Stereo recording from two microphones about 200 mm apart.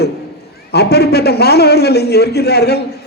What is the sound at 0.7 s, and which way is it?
A man's voice, 55° left (ahead or behind).